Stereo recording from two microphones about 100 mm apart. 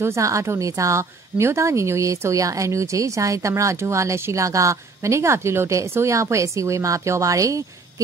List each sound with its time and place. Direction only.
0.0 s a woman's voice: 30° right (ahead or behind)